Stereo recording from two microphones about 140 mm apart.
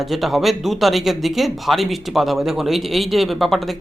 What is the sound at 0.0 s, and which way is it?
Speech, centre (ahead or behind).